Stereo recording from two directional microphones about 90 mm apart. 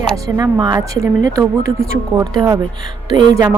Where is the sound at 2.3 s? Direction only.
40° right (ahead or behind).